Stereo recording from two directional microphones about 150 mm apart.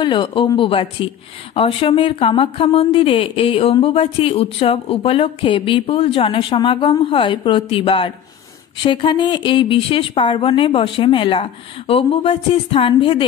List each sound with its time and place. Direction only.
0.0 s a woman's voice: 30° left (ahead or behind)